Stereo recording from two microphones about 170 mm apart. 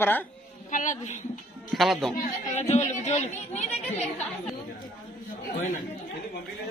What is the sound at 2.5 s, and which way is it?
Speech, 40° left (ahead or behind).